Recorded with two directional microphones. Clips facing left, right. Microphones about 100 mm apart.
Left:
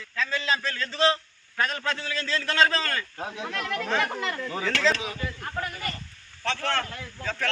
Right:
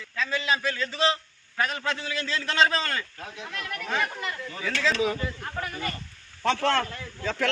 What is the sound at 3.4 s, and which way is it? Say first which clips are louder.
Speech: left 5 dB; 90° left.